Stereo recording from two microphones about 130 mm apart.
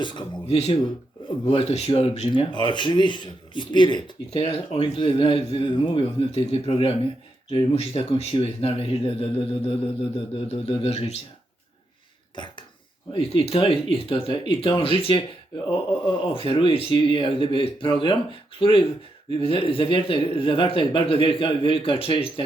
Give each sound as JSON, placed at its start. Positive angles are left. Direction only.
{"t": 0.0, "sound": "speech", "side_deg": 35}
{"t": 0.4, "sound": "speech", "side_deg": 50}
{"t": 4.3, "sound": "speech", "side_deg": 50}
{"t": 13.1, "sound": "speech", "side_deg": 50}